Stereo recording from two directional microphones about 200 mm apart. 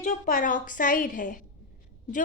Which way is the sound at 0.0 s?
40° left (ahead or behind).